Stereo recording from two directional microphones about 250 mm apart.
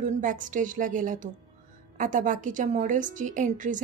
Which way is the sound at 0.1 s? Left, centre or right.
Right.